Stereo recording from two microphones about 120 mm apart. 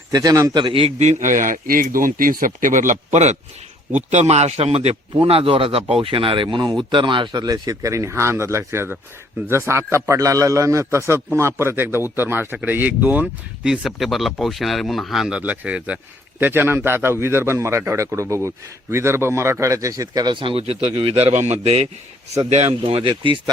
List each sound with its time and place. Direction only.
0.1 s a man's voice: 30° right (ahead or behind)
0.6 s speech: 50° right (ahead or behind)
0.9 s a man's voice: 75° right (ahead or behind); by 23.4 s 45° right (ahead or behind)